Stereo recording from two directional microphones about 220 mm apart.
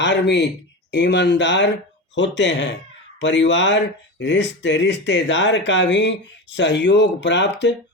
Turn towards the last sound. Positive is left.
turn(degrees=55)  # may be behind; listen again after turning